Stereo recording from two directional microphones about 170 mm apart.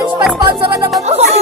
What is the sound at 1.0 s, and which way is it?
Music, 40° right (ahead or behind).